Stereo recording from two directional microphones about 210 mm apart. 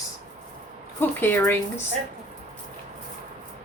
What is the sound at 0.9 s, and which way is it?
Speech, 10° left (ahead or behind).